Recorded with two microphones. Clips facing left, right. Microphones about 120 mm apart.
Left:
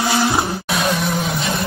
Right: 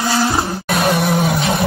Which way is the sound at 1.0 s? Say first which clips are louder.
Right 5 dB; 60° right (ahead or behind).